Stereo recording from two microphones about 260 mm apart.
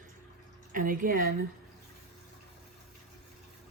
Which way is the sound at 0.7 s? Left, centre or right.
Right.